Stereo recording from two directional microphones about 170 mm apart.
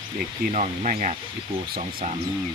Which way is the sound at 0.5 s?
45° right (ahead or behind).